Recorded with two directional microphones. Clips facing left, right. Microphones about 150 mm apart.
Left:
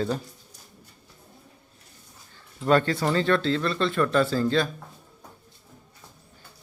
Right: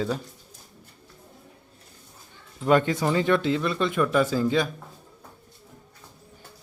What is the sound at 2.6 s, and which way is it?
Speech, 15° right (ahead or behind).